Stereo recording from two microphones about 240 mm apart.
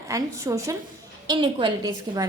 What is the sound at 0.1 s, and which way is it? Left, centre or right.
A woman's voice, centre.